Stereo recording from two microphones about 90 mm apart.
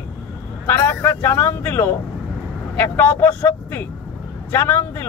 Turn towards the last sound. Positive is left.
turn(degrees=25)  # may be behind; listen again after turning